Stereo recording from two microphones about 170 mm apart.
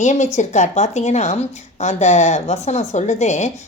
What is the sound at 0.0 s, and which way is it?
A woman's voice, 45° left (ahead or behind).